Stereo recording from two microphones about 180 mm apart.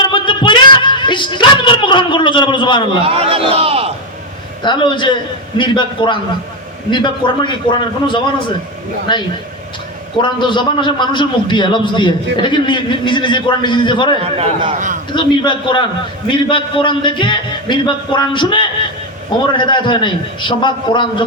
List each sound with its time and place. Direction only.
0.0 s music: 25° left (ahead or behind)
3.0 s a man's voice: 30° right (ahead or behind)
4.6 s a man's voice: 25° left (ahead or behind)
14.2 s a man's voice: 35° right (ahead or behind)
15.1 s a man's voice: 25° left (ahead or behind)